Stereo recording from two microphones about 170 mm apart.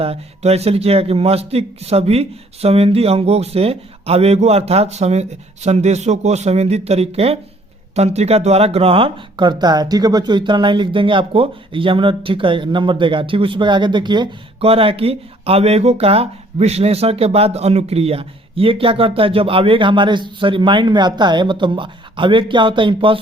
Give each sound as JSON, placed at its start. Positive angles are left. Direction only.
{"t": 0.0, "sound": "speech", "side_deg": -35}